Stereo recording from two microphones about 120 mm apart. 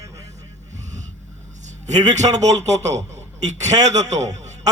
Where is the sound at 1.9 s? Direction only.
75° right (ahead or behind).